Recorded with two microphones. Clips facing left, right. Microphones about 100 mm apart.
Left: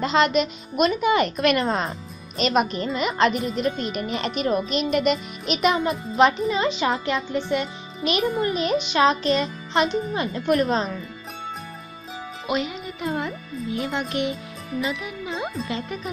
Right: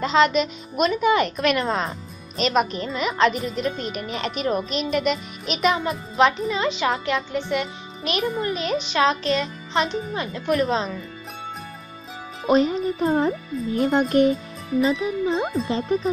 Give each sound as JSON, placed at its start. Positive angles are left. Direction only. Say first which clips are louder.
{"t": 0.0, "sound": "speech", "louder": "right 1 dB", "side_deg": 5}
{"t": 12.4, "sound": "speech", "louder": "right 8 dB", "side_deg": -35}